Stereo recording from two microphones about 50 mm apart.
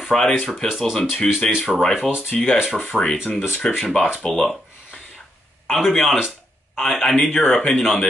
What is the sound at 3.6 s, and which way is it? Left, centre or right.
Speech, centre.